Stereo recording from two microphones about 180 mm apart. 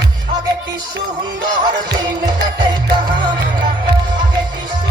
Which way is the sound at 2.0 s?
25° right (ahead or behind).